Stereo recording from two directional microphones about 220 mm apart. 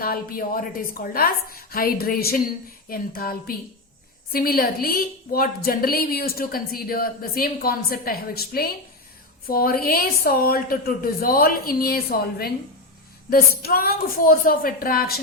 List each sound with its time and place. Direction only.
0.0 s a woman's voice: 40° left (ahead or behind)